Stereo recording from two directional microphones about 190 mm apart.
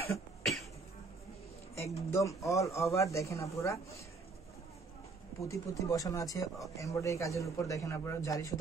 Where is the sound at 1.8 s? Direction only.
15° left (ahead or behind).